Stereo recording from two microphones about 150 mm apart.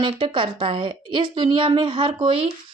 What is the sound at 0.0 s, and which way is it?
Speech, 35° right (ahead or behind).